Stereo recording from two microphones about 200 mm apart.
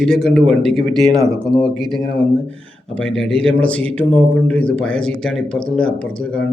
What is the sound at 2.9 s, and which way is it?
Speech, 5° left (ahead or behind).